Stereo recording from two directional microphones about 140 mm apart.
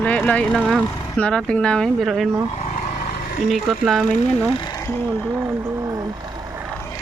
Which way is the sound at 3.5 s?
Centre (ahead or behind).